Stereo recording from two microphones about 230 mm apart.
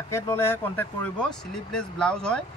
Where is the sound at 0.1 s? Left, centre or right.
Centre.